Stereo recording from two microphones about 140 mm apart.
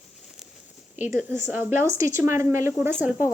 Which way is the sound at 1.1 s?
15° right (ahead or behind).